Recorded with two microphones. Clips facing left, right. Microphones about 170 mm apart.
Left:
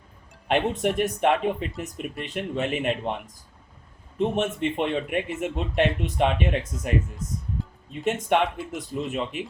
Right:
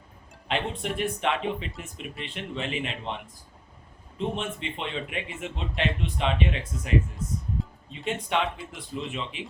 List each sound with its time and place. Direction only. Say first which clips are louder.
0.4 s speech: left 7 dB; 50° left (ahead or behind)
4.2 s speech: left 7 dB; 50° left (ahead or behind)
8.0 s speech: left 5 dB; 50° left (ahead or behind)